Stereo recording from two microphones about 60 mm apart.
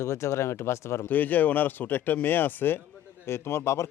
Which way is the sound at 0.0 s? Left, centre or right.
Left.